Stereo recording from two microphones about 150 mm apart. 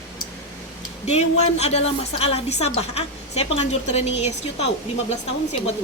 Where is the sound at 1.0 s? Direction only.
50° left (ahead or behind).